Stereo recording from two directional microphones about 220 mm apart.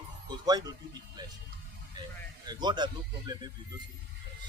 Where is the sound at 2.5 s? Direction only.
20° right (ahead or behind).